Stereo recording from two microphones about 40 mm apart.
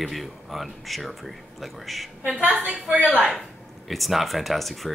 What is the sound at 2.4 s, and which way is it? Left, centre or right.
Speech, right.